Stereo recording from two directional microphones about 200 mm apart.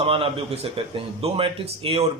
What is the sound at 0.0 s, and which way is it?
Speech, 30° right (ahead or behind).